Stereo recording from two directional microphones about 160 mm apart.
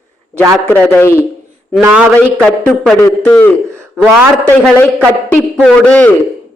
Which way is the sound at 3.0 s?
10° left (ahead or behind).